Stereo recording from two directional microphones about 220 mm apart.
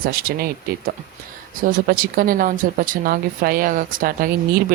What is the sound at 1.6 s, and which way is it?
A woman's voice, 40° right (ahead or behind).